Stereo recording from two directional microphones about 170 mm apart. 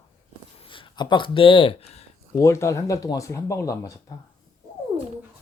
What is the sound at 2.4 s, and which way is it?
Speech, 15° left (ahead or behind).